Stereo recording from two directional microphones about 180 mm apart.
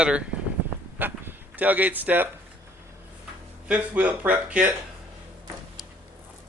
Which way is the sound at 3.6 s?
10° right (ahead or behind).